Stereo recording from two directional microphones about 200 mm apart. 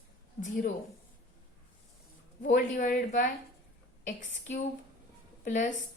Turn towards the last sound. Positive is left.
turn(degrees=40)  # may be behind; listen again after turning